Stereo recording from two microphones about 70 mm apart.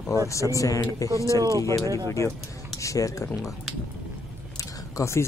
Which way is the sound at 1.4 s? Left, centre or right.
Right.